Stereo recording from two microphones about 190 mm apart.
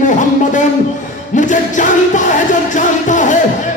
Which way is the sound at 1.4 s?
40° left (ahead or behind).